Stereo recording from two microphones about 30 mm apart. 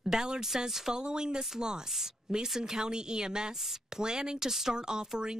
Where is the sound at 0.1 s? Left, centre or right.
Right.